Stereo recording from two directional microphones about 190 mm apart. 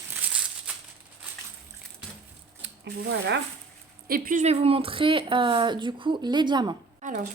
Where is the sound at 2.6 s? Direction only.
70° right (ahead or behind).